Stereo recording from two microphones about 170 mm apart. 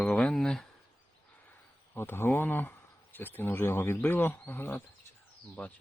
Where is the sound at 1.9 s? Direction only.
10° left (ahead or behind).